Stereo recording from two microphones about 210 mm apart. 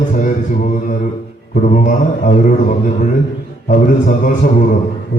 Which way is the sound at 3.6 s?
40° left (ahead or behind).